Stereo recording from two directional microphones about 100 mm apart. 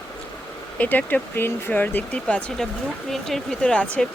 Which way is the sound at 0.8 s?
15° left (ahead or behind).